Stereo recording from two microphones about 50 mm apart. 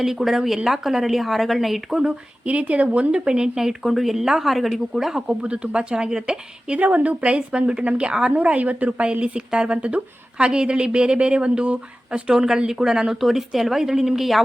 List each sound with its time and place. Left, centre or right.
0.0 s a woman's voice: centre
2.4 s speech: right
8.3 s a woman's voice: right; by 14.4 s centre